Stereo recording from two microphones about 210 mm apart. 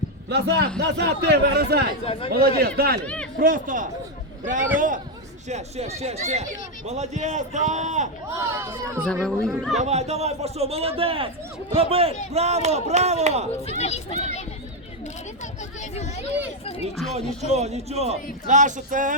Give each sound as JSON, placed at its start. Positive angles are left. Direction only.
{"t": 0.3, "sound": "a man's voice", "side_deg": -50}
{"t": 2.0, "sound": "speech", "side_deg": 25}
{"t": 2.4, "sound": "a man's voice", "side_deg": -45}
{"t": 5.5, "sound": "a man's voice", "side_deg": -30}
{"t": 8.4, "sound": "speech", "side_deg": -15}
{"t": 9.2, "sound": "speech", "side_deg": 0}
{"t": 9.7, "sound": "a man's voice", "side_deg": -30}
{"t": 13.7, "sound": "speech", "side_deg": 30}
{"t": 17.2, "sound": "a man's voice", "side_deg": -30}